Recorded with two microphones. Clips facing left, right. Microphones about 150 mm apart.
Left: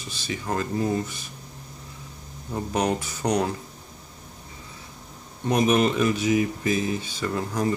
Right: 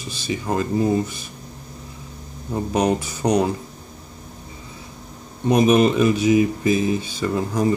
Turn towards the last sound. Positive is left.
turn(degrees=-20)  # may be behind; listen again after turning